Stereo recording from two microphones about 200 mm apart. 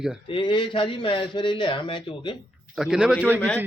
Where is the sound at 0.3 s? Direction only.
25° left (ahead or behind).